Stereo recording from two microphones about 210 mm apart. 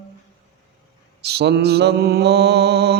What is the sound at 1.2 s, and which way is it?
Mantra, 50° right (ahead or behind).